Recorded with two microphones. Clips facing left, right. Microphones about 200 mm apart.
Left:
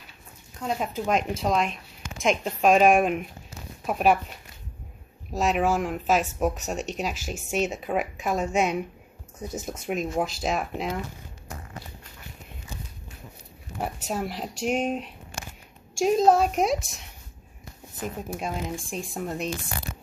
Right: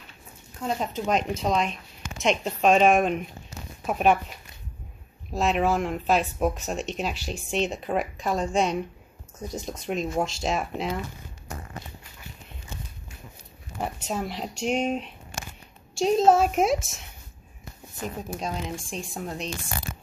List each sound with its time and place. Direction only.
0.6 s speech: 5° left (ahead or behind)
5.4 s speech: 5° left (ahead or behind)
13.7 s speech: 5° left (ahead or behind)